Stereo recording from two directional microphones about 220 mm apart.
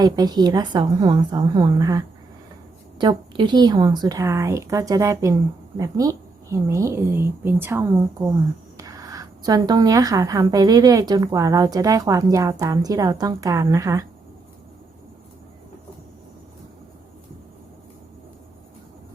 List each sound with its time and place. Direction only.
0.0 s a woman's voice: 20° right (ahead or behind)